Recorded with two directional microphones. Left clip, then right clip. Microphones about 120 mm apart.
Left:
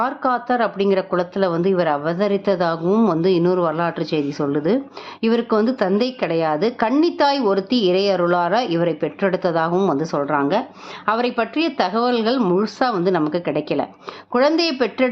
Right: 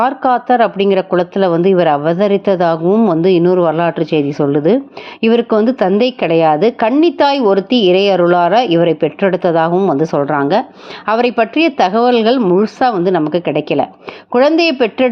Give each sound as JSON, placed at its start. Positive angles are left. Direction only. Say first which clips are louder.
{"t": 0.0, "sound": "speech", "louder": "right 7 dB", "side_deg": -35}
{"t": 2.8, "sound": "speech", "louder": "right 6 dB", "side_deg": -20}
{"t": 3.1, "sound": "speech", "louder": "right 6 dB", "side_deg": -40}